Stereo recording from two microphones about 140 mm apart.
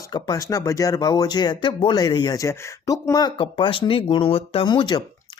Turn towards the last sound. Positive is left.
turn(degrees=30)  # may be behind; listen again after turning